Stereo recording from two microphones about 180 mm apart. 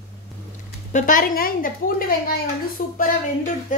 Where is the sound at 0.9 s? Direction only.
50° left (ahead or behind).